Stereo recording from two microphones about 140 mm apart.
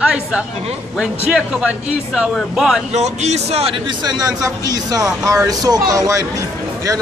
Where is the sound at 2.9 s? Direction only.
55° right (ahead or behind).